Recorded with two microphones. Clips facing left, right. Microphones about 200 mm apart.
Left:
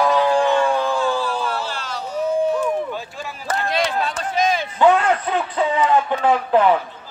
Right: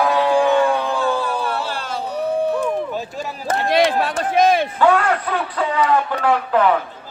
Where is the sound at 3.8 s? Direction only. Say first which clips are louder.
Right 5 dB; 55° right (ahead or behind).